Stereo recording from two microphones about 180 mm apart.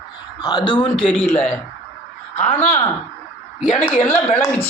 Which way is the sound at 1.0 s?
10° left (ahead or behind).